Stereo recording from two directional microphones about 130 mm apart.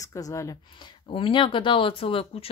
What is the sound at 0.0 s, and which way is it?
Speech, 25° left (ahead or behind).